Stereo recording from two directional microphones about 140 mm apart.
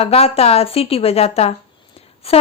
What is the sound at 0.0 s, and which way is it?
A woman's voice, 45° left (ahead or behind).